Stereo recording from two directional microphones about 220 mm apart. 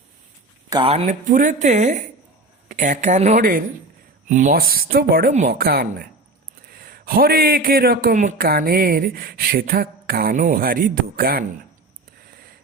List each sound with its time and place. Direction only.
0.7 s a man's voice: 25° right (ahead or behind); by 11.4 s 40° right (ahead or behind)